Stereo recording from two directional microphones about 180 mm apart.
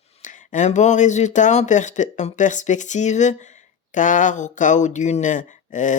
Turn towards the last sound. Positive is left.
turn(degrees=45)  # may be behind; listen again after turning